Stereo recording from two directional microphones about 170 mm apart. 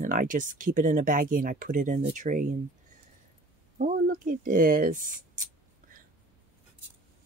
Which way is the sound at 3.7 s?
55° right (ahead or behind).